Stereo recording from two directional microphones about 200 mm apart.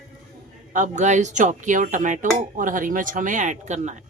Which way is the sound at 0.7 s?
40° right (ahead or behind).